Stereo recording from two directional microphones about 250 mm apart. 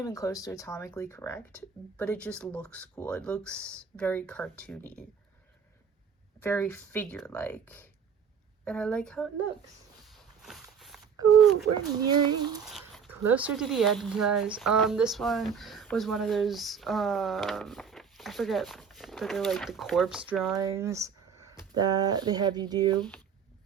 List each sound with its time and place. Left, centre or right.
0.0 s speech: centre
6.4 s speech: centre
10.1 s a sound: centre
12.2 s speech: centre
12.6 s speech: centre
20.6 s speech: centre